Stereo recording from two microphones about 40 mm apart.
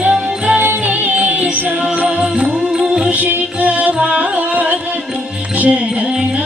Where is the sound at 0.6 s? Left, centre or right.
Right.